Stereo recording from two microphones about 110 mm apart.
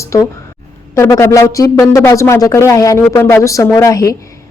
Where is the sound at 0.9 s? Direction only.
25° left (ahead or behind).